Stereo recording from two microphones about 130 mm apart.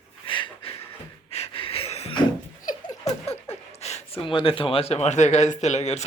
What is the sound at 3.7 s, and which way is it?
Speech, 55° left (ahead or behind).